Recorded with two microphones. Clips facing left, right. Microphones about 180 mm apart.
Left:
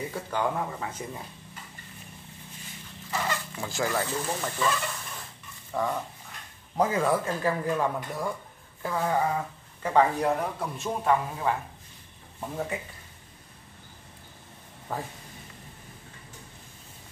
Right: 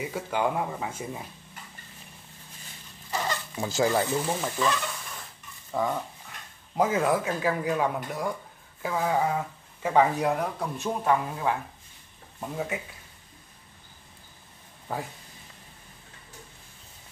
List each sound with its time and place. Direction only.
0.0 s speech: 10° right (ahead or behind)
3.5 s speech: 25° right (ahead or behind)
4.1 s speech: 10° right (ahead or behind)
14.9 s speech: 5° right (ahead or behind)